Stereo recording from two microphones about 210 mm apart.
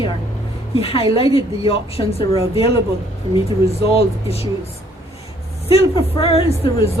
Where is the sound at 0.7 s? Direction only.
25° left (ahead or behind).